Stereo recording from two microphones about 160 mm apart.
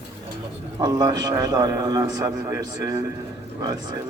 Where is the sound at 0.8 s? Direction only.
25° right (ahead or behind).